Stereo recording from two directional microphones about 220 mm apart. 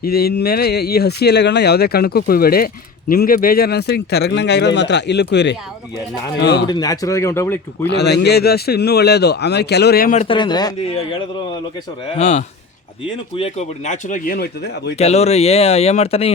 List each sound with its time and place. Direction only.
0.0 s speech: 45° left (ahead or behind)
6.7 s speech: 15° left (ahead or behind)
7.9 s speech: 50° left (ahead or behind)
10.2 s speech: 20° left (ahead or behind); by 14.9 s 45° left (ahead or behind)
14.9 s speech: 30° left (ahead or behind)